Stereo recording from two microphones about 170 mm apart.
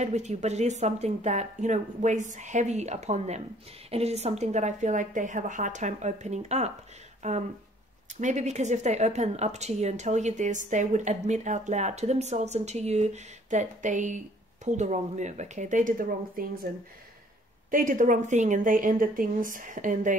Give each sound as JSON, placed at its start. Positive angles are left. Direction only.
{"t": 0.0, "sound": "speech", "side_deg": -40}
{"t": 17.6, "sound": "speech", "side_deg": -50}